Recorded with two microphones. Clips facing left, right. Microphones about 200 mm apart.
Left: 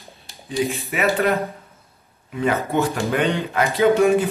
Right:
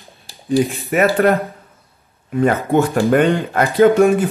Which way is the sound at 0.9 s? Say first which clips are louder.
Right 7 dB; 50° right (ahead or behind).